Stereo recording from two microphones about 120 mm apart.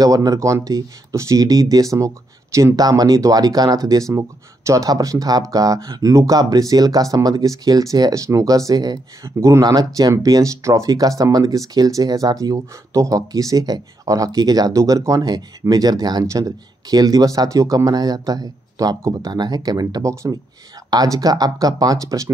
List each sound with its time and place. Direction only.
0.0 s speech: 30° right (ahead or behind)